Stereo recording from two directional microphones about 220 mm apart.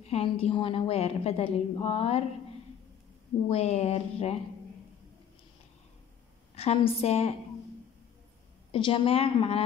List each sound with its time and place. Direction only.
0.1 s a woman's voice: 25° left (ahead or behind)
3.4 s a woman's voice: 30° left (ahead or behind)
6.5 s a woman's voice: 30° left (ahead or behind)
8.7 s a woman's voice: 25° left (ahead or behind)